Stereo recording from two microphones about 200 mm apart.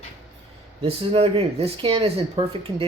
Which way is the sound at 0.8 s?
30° right (ahead or behind).